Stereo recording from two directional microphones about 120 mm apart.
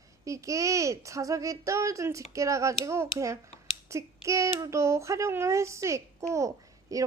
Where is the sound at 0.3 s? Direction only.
25° right (ahead or behind).